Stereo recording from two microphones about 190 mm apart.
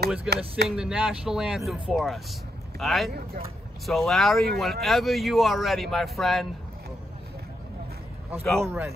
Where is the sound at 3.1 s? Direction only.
55° right (ahead or behind).